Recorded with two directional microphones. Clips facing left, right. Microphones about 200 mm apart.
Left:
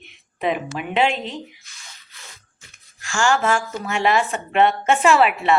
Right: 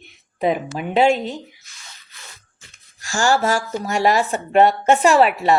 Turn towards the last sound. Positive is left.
turn(degrees=-35)  # may be behind; listen again after turning